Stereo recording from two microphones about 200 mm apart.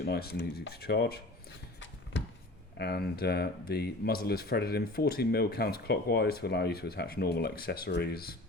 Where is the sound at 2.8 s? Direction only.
50° left (ahead or behind).